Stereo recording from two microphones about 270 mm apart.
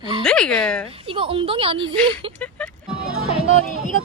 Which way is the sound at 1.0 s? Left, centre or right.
Centre.